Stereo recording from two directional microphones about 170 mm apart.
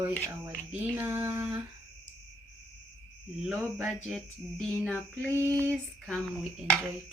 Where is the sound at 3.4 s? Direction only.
Centre (ahead or behind).